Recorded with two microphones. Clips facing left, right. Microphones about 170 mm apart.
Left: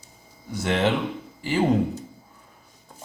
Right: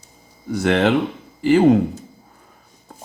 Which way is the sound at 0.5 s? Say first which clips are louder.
Right 6 dB; 70° right (ahead or behind).